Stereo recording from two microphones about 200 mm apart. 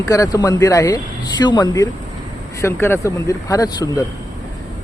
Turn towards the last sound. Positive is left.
turn(degrees=15)  # may be behind; listen again after turning